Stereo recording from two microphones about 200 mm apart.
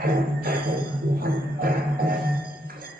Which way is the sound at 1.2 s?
45° right (ahead or behind).